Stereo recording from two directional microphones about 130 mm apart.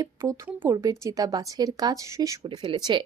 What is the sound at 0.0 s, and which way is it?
Speech, 25° right (ahead or behind).